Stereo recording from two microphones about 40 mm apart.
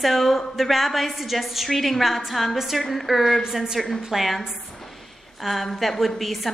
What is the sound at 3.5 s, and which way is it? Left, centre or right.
Speech, centre.